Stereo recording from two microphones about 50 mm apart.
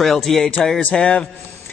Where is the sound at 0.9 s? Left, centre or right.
Left.